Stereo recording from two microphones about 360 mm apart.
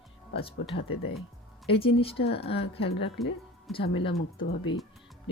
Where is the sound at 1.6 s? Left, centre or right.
Centre.